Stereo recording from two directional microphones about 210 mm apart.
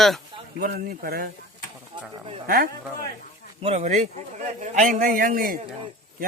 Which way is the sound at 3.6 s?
30° right (ahead or behind).